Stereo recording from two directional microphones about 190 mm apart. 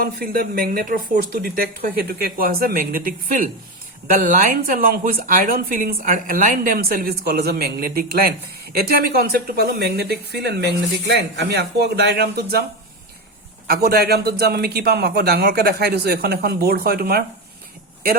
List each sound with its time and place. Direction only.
0.0 s speech: 50° right (ahead or behind)
13.7 s speech: 55° right (ahead or behind)